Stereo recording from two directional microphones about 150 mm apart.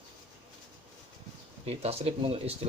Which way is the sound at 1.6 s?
45° right (ahead or behind).